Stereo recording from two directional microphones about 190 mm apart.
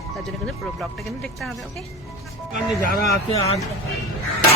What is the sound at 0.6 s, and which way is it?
Speech, centre (ahead or behind).